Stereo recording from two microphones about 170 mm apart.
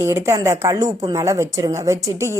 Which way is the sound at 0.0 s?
15° right (ahead or behind).